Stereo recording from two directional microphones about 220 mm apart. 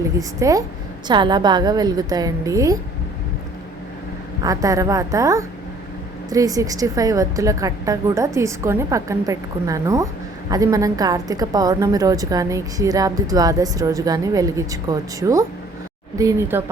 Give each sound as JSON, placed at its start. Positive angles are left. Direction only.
{"t": 0.2, "sound": "a woman's voice", "side_deg": -15}
{"t": 4.4, "sound": "a woman's voice", "side_deg": -15}